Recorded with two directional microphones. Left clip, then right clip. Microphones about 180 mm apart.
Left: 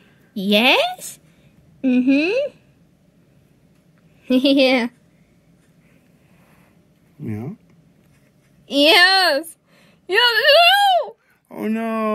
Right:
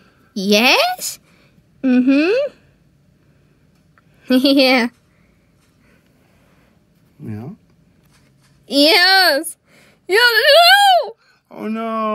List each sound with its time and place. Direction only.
0.0 s a woman's voice: 40° right (ahead or behind); by 2.6 s 55° right (ahead or behind)
4.2 s speech: 45° right (ahead or behind)
7.2 s a sound: 15° left (ahead or behind)
8.6 s speech: 40° right (ahead or behind)
11.4 s speech: 10° left (ahead or behind)